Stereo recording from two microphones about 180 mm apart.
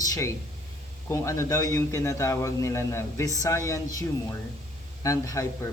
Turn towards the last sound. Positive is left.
turn(degrees=15)  # may be behind; listen again after turning